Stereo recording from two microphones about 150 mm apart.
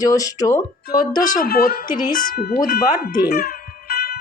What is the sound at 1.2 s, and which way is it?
Speech, 70° left (ahead or behind).